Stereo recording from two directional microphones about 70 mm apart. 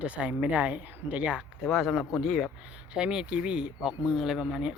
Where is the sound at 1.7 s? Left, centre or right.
Centre.